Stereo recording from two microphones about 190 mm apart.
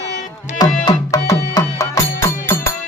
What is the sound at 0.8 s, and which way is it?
Music, 20° left (ahead or behind).